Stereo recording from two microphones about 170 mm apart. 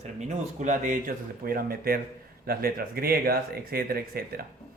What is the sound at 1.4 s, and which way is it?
Speech, 60° right (ahead or behind).